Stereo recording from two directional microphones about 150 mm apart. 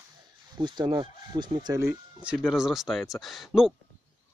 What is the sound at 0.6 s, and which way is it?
Speech, 30° right (ahead or behind).